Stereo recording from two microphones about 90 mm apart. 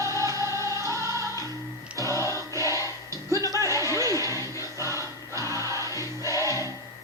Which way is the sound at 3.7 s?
35° right (ahead or behind).